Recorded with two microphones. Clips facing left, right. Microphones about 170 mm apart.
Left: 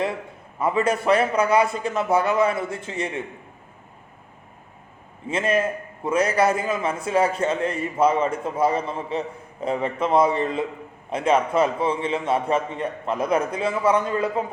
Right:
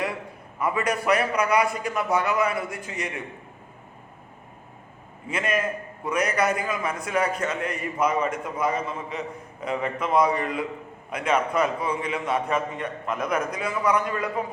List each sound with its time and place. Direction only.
0.6 s a man's voice: 25° left (ahead or behind)
5.3 s a man's voice: 30° left (ahead or behind)